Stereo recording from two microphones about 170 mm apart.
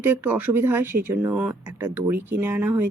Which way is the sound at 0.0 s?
10° right (ahead or behind).